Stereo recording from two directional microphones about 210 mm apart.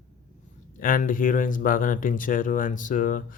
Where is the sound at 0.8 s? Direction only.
40° left (ahead or behind).